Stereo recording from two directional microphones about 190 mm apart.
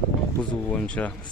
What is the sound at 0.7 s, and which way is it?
Speech, 5° left (ahead or behind).